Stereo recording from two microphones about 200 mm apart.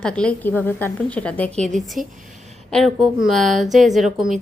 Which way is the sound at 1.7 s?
Centre (ahead or behind).